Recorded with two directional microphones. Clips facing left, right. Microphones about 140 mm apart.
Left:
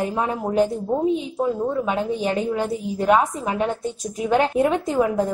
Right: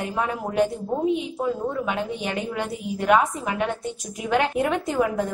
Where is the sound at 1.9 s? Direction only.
30° left (ahead or behind).